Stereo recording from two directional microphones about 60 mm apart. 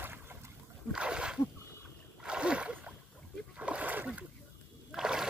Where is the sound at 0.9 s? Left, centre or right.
Centre.